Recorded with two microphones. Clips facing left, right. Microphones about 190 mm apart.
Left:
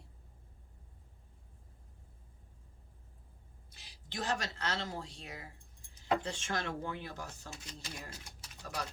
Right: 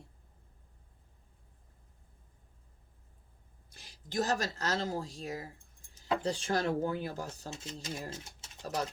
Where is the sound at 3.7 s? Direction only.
50° right (ahead or behind).